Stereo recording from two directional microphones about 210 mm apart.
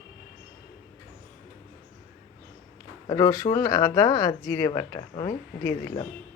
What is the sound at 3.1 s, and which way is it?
Speech, 20° left (ahead or behind).